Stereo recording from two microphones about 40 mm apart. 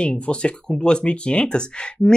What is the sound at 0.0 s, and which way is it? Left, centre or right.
Speech, left.